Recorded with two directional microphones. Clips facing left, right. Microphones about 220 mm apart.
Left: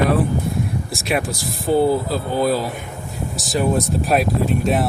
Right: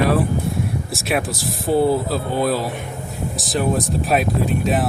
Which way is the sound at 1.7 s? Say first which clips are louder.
Even; centre (ahead or behind).